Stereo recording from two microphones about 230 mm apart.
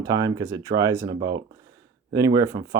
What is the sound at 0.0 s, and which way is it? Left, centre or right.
Speech, centre.